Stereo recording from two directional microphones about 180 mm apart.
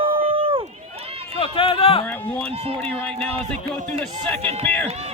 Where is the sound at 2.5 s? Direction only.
30° right (ahead or behind).